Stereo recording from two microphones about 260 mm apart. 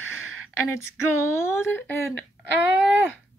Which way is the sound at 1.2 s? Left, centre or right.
Centre.